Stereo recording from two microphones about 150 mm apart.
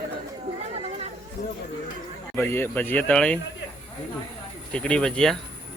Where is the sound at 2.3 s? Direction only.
15° left (ahead or behind).